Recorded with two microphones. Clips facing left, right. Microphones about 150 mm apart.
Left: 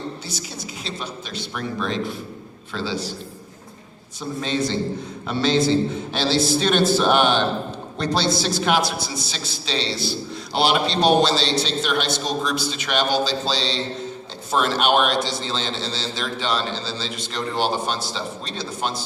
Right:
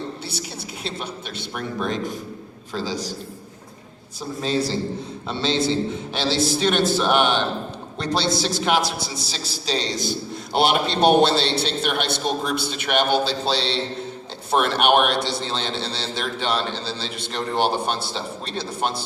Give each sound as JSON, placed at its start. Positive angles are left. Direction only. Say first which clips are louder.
{"t": 0.9, "sound": "a man's voice", "louder": "right 2 dB", "side_deg": -55}
{"t": 4.4, "sound": "a man's voice", "louder": "even", "side_deg": -35}